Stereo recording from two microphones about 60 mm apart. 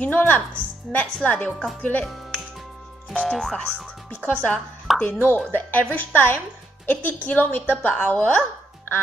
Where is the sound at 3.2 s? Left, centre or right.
Centre.